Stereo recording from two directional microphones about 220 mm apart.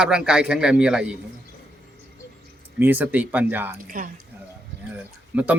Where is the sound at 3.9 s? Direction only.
40° right (ahead or behind).